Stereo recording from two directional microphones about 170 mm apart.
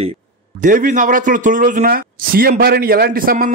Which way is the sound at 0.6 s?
55° right (ahead or behind).